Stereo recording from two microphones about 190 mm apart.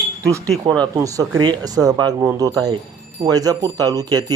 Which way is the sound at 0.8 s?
20° right (ahead or behind).